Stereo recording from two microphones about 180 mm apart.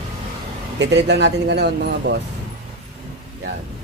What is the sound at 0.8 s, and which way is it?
Speech, 75° right (ahead or behind).